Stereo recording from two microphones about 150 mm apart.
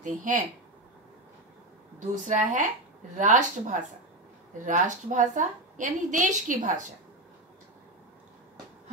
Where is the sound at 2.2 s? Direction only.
60° right (ahead or behind).